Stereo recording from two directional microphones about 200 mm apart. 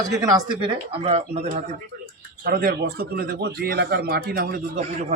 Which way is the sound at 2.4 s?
50° right (ahead or behind).